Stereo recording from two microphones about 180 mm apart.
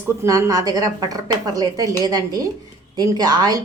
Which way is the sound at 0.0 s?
15° right (ahead or behind).